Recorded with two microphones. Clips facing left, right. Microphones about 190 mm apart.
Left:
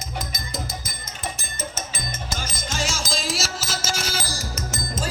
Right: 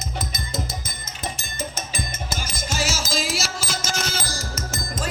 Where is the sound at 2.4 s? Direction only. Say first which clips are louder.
Right 2 dB; 10° right (ahead or behind); by 4.2 s 10° left (ahead or behind).